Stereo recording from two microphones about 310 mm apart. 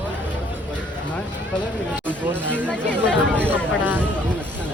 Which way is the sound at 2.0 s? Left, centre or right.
Centre.